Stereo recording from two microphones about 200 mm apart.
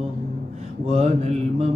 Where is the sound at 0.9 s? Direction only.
35° right (ahead or behind).